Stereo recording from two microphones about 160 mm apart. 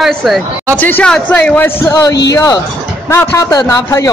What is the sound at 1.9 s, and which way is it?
A man's voice, 20° left (ahead or behind).